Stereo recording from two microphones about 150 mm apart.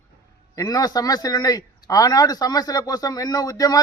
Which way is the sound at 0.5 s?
25° left (ahead or behind).